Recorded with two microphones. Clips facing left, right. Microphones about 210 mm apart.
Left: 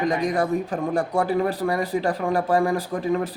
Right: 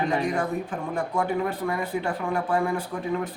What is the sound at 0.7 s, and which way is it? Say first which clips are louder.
Speech: left 5 dB; 90° left.